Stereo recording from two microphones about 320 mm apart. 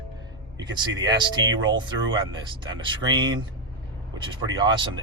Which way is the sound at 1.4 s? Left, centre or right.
Right.